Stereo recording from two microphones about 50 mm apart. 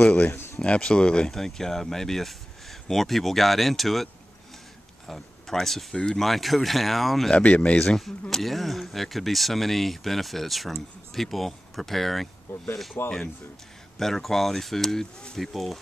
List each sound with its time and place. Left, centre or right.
0.0 s speech: left
0.3 s a sound: left
0.6 s speech: centre
1.3 s speech: centre
7.2 s speech: left
8.3 s speech: centre
12.5 s speech: left
13.9 s speech: centre